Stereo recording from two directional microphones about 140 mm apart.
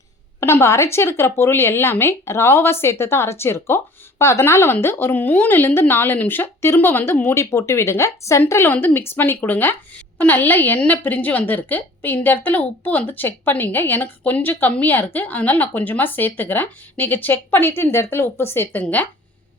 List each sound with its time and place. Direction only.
0.3 s a woman's voice: 20° left (ahead or behind)